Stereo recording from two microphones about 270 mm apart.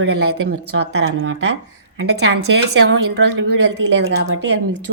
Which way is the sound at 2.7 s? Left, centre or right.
Right.